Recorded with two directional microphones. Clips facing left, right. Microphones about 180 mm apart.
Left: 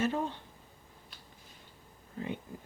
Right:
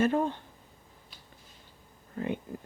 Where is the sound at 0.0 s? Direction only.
55° right (ahead or behind).